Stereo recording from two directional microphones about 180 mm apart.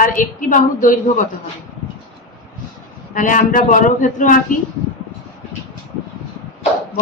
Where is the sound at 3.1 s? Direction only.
45° left (ahead or behind).